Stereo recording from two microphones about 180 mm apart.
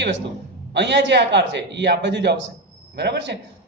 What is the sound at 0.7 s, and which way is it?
A man's voice, 75° right (ahead or behind).